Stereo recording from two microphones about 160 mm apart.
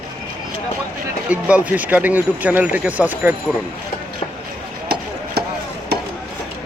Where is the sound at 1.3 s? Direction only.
10° right (ahead or behind).